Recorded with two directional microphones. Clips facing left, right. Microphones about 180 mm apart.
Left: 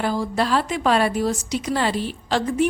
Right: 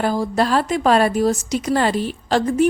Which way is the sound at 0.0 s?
45° right (ahead or behind).